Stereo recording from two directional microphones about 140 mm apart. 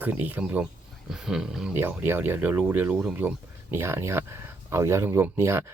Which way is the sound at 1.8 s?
15° right (ahead or behind).